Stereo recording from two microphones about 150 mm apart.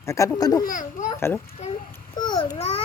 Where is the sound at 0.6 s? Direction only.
65° left (ahead or behind).